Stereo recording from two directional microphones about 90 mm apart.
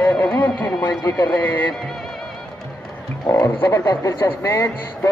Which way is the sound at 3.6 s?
30° left (ahead or behind).